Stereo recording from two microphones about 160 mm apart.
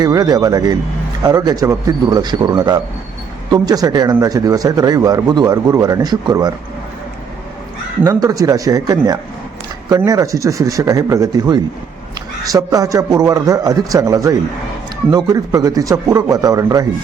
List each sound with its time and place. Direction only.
0.0 s speech: 25° right (ahead or behind)
8.0 s speech: 20° right (ahead or behind)